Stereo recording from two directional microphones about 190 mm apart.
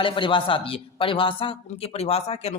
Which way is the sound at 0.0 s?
25° left (ahead or behind).